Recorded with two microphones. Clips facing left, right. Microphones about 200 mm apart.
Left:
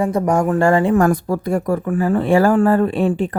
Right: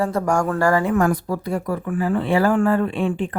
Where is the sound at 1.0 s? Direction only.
50° left (ahead or behind).